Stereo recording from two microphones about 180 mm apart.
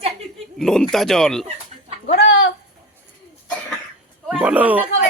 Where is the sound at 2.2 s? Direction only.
85° left.